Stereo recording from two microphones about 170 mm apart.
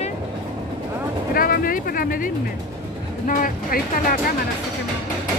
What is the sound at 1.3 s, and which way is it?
Speech, 60° left (ahead or behind).